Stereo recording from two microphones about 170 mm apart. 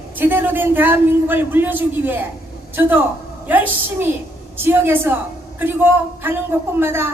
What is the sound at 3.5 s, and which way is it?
A man's voice, 10° right (ahead or behind).